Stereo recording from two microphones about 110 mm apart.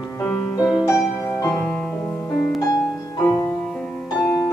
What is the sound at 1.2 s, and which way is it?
Music, 20° left (ahead or behind).